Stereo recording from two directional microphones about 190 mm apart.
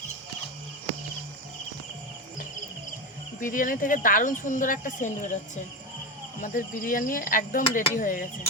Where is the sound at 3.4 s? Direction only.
45° left (ahead or behind).